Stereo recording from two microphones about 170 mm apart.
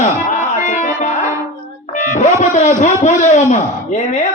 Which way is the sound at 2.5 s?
45° left (ahead or behind).